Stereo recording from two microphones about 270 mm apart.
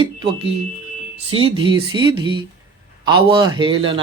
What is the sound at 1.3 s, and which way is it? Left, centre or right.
A man's voice, centre.